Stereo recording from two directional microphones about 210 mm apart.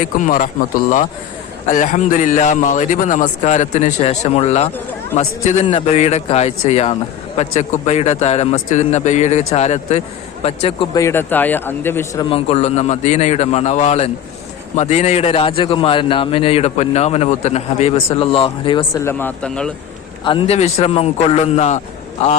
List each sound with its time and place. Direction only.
0.0 s a man's voice: 40° left (ahead or behind)
10.9 s a man's voice: 10° left (ahead or behind)
19.0 s speech: 5° left (ahead or behind)
20.2 s a man's voice: 25° left (ahead or behind)